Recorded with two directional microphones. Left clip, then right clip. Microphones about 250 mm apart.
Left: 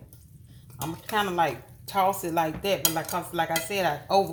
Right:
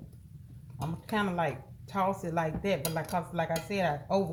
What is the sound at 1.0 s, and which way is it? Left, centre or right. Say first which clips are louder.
Speech: left 5 dB; centre.